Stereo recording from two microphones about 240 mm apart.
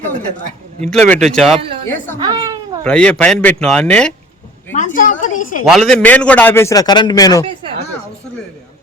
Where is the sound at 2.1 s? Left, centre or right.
Centre.